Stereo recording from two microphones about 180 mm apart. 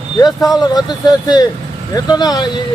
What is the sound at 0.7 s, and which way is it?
Speech, 20° left (ahead or behind).